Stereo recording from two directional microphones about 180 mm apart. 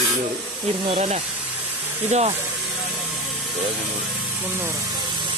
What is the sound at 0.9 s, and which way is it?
Speech, 35° right (ahead or behind).